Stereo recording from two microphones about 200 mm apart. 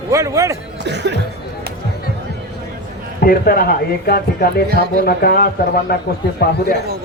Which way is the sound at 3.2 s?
45° left (ahead or behind).